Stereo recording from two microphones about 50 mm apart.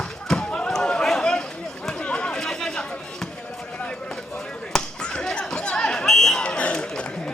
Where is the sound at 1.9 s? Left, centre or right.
Left.